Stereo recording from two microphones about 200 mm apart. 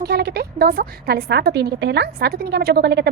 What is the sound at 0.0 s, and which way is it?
A woman's voice, 50° right (ahead or behind).